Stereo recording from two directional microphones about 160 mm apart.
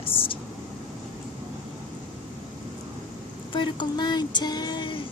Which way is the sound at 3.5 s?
30° left (ahead or behind).